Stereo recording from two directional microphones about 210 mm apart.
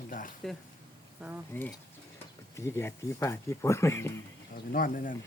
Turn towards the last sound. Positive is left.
turn(degrees=40)  # may be behind; listen again after turning